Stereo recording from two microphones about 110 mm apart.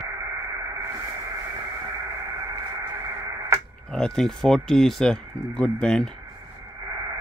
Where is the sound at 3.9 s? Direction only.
5° left (ahead or behind).